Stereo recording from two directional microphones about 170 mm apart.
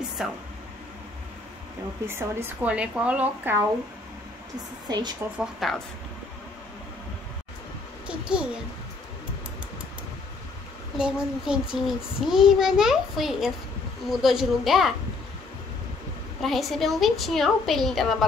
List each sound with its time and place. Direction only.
0.2 s a woman's voice: 5° right (ahead or behind)
2.0 s speech: 15° right (ahead or behind)
4.8 s a woman's voice: 25° right (ahead or behind)
5.4 s a woman's voice: centre (ahead or behind)
8.1 s a woman's voice: 5° right (ahead or behind)
11.0 s a woman's voice: 5° right (ahead or behind)
16.3 s a woman's voice: centre (ahead or behind)